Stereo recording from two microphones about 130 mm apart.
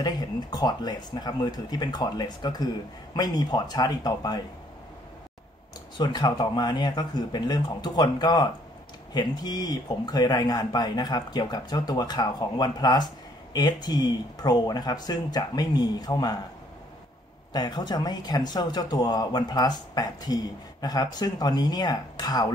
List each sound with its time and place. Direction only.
0.0 s speech: 30° left (ahead or behind)
5.9 s speech: 35° left (ahead or behind)
17.5 s speech: 35° left (ahead or behind)